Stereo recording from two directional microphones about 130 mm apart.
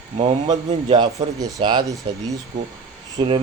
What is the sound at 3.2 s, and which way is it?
Speech, 40° right (ahead or behind).